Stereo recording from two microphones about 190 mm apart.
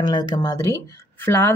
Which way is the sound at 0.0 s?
25° left (ahead or behind).